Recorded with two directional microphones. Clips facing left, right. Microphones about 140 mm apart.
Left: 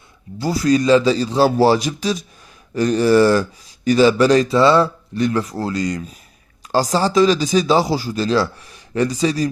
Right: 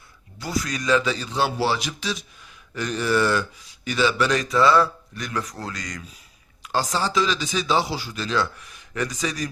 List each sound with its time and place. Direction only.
0.3 s speech: 35° left (ahead or behind)